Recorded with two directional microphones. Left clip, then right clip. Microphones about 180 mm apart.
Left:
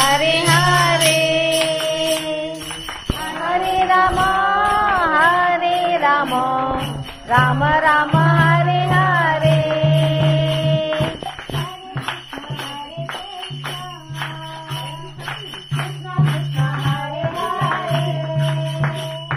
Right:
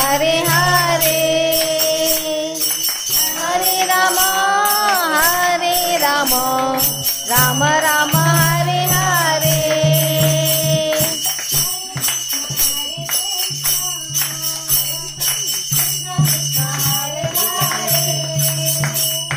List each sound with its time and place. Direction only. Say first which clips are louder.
0.1 s music: even; 25° right (ahead or behind)
3.4 s music: left 2 dB; 45° right (ahead or behind)